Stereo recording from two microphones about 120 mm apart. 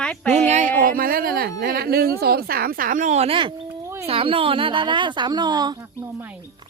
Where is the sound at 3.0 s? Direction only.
75° right (ahead or behind).